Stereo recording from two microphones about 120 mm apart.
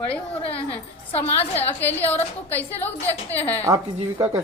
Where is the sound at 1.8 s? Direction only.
15° left (ahead or behind).